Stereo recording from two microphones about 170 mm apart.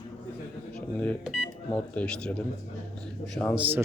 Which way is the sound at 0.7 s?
10° left (ahead or behind).